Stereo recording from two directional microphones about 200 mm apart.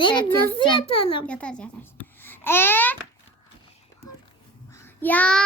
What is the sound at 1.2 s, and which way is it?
A child's voice, 5° left (ahead or behind).